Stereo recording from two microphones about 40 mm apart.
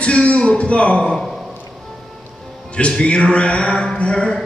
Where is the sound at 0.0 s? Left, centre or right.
Left.